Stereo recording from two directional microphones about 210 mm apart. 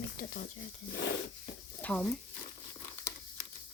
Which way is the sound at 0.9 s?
55° left (ahead or behind).